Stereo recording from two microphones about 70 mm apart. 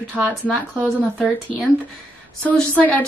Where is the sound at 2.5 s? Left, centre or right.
Centre.